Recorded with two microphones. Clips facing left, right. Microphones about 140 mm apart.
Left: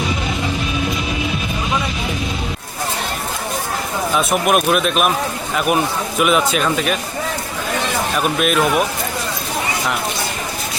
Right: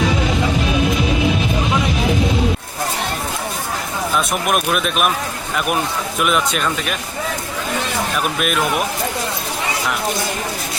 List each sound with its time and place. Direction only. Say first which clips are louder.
4.2 s speech: left 5 dB; centre (ahead or behind)
6.1 s speech: left 3 dB; centre (ahead or behind)
8.1 s speech: left 5 dB; centre (ahead or behind)